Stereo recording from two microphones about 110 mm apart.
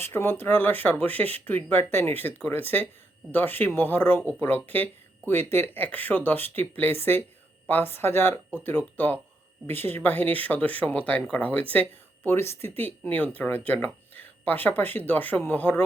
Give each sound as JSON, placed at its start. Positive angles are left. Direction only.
{"t": 0.0, "sound": "a woman's voice", "side_deg": 20}